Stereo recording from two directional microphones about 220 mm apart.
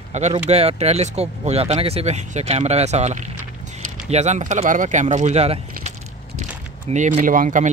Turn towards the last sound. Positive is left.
turn(degrees=-35)  # may be behind; listen again after turning